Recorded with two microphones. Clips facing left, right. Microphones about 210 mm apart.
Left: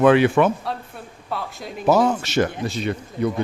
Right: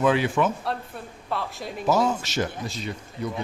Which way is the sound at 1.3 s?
Centre (ahead or behind).